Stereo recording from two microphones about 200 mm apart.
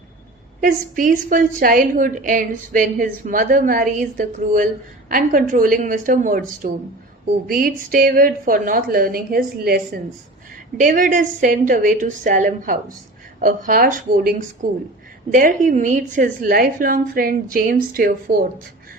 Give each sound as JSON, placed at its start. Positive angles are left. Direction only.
{"t": 0.6, "sound": "a woman's voice", "side_deg": -40}